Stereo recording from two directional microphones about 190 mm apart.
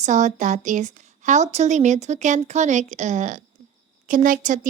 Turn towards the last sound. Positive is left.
turn(degrees=-45)  # may be behind; listen again after turning